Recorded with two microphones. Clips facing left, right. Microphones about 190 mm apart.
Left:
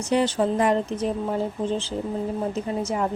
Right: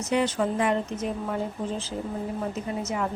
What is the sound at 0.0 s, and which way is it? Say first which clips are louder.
A woman's voice: left 3 dB; 30° left (ahead or behind).